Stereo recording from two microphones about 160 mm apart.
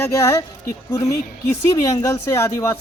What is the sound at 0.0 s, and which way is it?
A man's voice, 20° left (ahead or behind).